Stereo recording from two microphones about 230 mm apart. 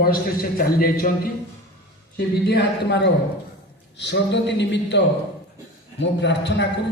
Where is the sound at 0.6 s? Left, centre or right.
Left.